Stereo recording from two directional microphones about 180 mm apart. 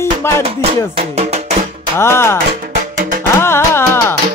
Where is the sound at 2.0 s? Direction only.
15° left (ahead or behind).